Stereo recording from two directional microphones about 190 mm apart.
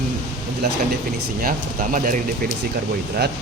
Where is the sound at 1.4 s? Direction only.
45° right (ahead or behind).